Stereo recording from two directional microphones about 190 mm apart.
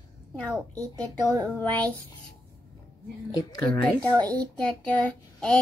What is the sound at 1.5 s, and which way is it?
Speech, 5° left (ahead or behind).